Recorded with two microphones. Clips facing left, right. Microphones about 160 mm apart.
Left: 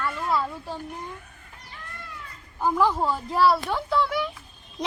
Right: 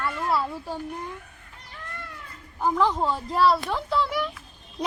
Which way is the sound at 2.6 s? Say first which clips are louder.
Even; 10° left (ahead or behind).